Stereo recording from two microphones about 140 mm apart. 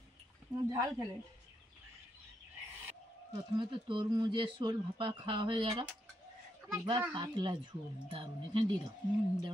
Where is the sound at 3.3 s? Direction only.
35° right (ahead or behind).